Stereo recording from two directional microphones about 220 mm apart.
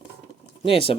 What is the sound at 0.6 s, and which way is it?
Speech, 25° left (ahead or behind).